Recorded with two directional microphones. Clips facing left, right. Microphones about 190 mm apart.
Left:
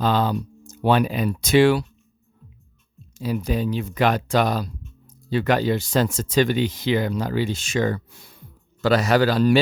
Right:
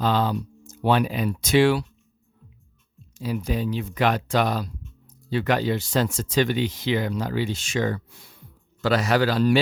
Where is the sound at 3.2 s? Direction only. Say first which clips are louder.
Left 2 dB; 40° left (ahead or behind).